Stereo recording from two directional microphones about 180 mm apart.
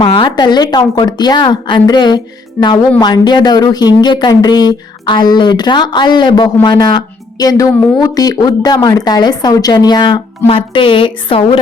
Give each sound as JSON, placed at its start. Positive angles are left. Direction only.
{"t": 0.0, "sound": "speech", "side_deg": 25}